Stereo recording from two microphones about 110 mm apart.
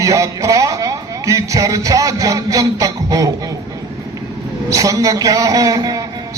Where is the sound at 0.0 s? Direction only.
30° right (ahead or behind).